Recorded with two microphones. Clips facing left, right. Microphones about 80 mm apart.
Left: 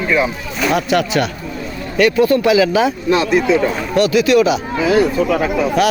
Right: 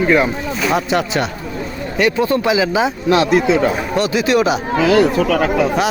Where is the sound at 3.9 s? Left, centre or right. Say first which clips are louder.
Left 5 dB; right.